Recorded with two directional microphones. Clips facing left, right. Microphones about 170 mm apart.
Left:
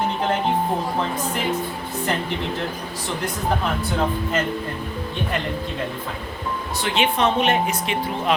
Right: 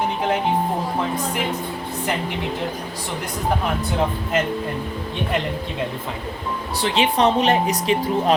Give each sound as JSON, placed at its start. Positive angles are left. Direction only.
{"t": 6.7, "sound": "speech", "side_deg": -35}